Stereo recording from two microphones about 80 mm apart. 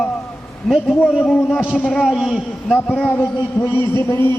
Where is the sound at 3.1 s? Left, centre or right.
Left.